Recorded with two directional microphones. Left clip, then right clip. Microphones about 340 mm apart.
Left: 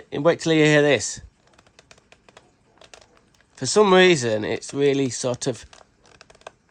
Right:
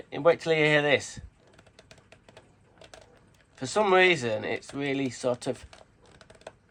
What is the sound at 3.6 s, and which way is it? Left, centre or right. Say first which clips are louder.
Speech: left 6 dB; left.